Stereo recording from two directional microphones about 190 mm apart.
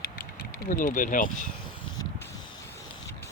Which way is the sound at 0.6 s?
45° left (ahead or behind).